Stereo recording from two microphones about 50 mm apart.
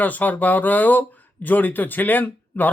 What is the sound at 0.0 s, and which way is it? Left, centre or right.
Speech, left.